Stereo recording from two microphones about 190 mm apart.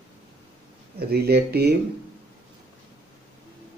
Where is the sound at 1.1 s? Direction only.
55° right (ahead or behind).